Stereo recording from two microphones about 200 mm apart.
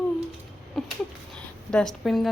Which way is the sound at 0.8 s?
Centre (ahead or behind).